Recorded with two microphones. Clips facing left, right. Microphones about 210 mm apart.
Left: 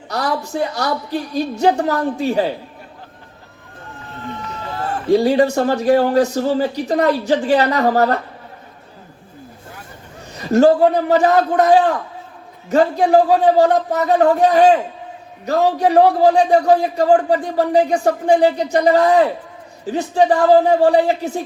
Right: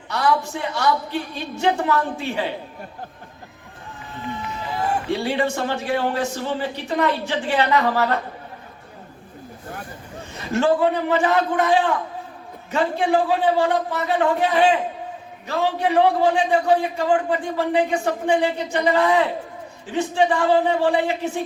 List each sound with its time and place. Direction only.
0.1 s a man's voice: 40° left (ahead or behind)
4.6 s run: 15° right (ahead or behind)
5.1 s a man's voice: 40° left (ahead or behind)
10.5 s a man's voice: 40° left (ahead or behind)